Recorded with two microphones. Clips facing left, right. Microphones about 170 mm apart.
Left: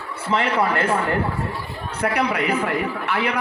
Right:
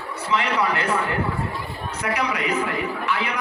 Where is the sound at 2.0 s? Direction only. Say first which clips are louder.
Left 4 dB; 55° left (ahead or behind).